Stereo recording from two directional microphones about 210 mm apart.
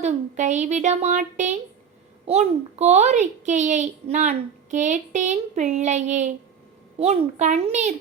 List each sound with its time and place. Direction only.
0.0 s a child's voice: 35° right (ahead or behind)